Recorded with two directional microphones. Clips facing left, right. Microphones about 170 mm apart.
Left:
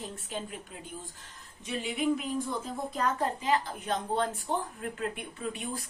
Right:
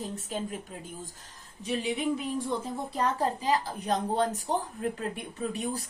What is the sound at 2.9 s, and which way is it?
A woman's voice, 35° right (ahead or behind).